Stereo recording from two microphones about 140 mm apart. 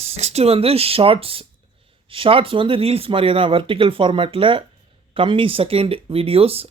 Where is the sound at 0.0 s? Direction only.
50° right (ahead or behind).